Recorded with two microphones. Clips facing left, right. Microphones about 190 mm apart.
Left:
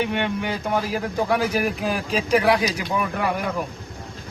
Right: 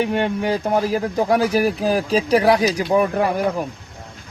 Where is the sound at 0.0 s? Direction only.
40° right (ahead or behind).